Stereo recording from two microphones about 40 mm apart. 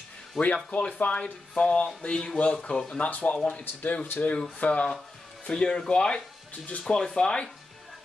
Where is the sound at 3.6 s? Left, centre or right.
Left.